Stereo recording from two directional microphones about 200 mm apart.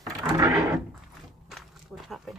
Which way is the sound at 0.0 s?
20° right (ahead or behind).